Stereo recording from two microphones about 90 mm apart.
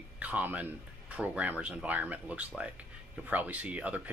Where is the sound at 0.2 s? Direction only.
15° right (ahead or behind).